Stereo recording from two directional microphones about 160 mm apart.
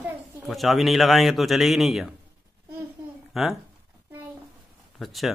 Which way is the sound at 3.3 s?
Centre (ahead or behind).